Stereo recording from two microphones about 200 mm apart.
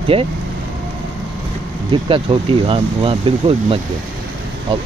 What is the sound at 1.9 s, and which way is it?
Speech, 25° right (ahead or behind).